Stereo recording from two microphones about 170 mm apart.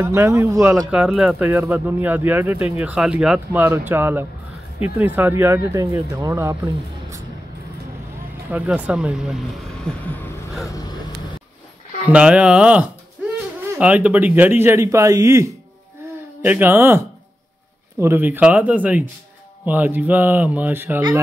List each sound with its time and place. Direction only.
0.0 s speech: 15° right (ahead or behind)
0.8 s speech: 5° right (ahead or behind)
8.5 s speech: 10° right (ahead or behind)
9.9 s vehicle: 5° left (ahead or behind)
12.1 s speech: 5° right (ahead or behind)
18.0 s speech: 10° right (ahead or behind)